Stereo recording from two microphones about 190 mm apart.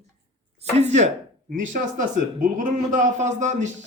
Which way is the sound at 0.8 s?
35° right (ahead or behind).